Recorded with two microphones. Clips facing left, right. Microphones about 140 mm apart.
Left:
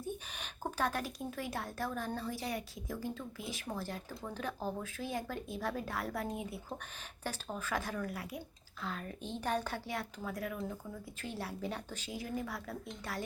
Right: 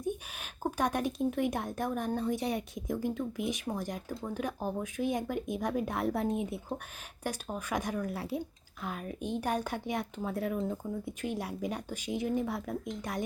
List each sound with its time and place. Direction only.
0.0 s a woman's voice: 10° right (ahead or behind); by 8.4 s 30° right (ahead or behind)
8.8 s a woman's voice: 15° right (ahead or behind); by 11.1 s 30° right (ahead or behind)
11.2 s a woman's voice: 15° right (ahead or behind)